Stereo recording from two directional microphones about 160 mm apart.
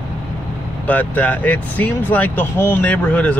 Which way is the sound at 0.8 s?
10° left (ahead or behind).